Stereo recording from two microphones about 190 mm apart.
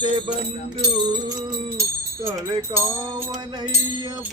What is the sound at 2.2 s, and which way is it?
Wind chime, 15° right (ahead or behind).